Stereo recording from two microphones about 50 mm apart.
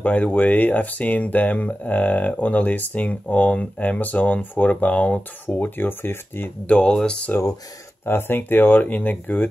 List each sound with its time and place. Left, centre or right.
0.0 s speech: left
6.6 s speech: left
6.9 s speech: centre
8.0 s speech: left